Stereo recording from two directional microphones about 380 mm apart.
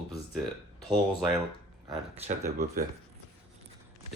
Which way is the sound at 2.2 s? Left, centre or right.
Centre.